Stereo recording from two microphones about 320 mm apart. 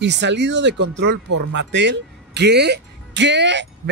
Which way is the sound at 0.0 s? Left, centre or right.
Right.